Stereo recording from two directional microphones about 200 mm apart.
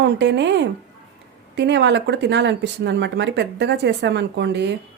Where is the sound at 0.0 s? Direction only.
60° right (ahead or behind).